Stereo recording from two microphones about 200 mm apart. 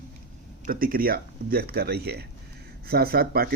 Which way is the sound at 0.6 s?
45° right (ahead or behind).